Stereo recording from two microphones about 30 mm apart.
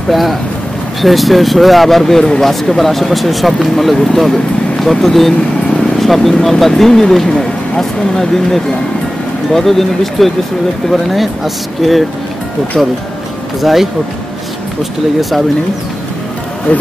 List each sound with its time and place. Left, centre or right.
0.1 s speech: centre
13.6 s speech: centre